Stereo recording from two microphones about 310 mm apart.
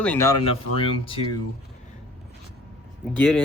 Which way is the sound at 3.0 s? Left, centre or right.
Centre.